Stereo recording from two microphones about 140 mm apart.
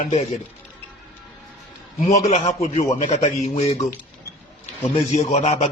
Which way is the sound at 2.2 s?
45° left (ahead or behind).